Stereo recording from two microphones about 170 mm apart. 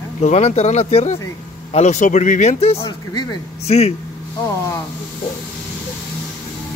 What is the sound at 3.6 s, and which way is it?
Speech, 40° left (ahead or behind).